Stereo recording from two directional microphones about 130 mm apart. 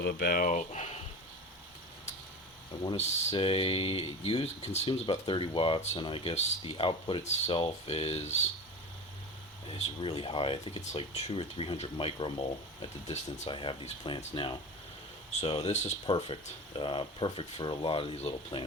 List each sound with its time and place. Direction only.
0.3 s speech: 85° left; by 1.0 s 60° left (ahead or behind)
2.9 s speech: 55° left (ahead or behind)
9.7 s speech: 55° left (ahead or behind)
13.5 s speech: 40° left (ahead or behind)
15.3 s speech: 60° left (ahead or behind)
16.0 s speech: 45° left (ahead or behind)